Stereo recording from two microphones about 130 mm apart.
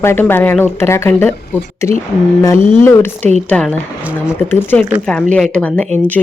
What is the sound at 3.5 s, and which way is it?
Speech, 5° left (ahead or behind).